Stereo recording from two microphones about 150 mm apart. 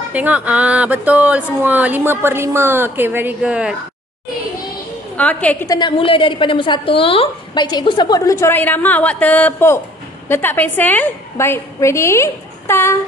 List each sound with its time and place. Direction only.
0.1 s speech: 10° right (ahead or behind)
5.1 s a woman's voice: 10° left (ahead or behind)
5.7 s a woman's voice: 30° left (ahead or behind); by 12.9 s 15° left (ahead or behind)